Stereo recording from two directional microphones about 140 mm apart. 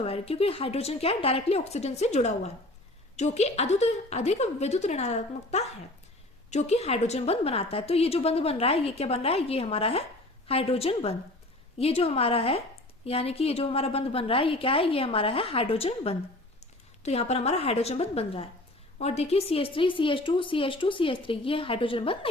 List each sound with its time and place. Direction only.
0.0 s a woman's voice: 45° left (ahead or behind)